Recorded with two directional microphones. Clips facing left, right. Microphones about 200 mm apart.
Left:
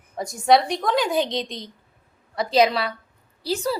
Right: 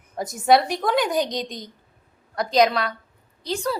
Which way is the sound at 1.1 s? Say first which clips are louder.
Left 1 dB; 45° right (ahead or behind).